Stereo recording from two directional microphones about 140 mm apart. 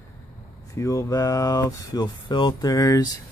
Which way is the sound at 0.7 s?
20° left (ahead or behind).